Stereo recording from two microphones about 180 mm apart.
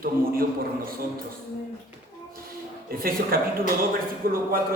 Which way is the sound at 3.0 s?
55° right (ahead or behind).